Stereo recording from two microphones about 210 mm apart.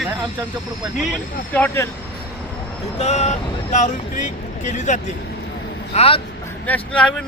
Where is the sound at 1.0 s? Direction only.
5° left (ahead or behind).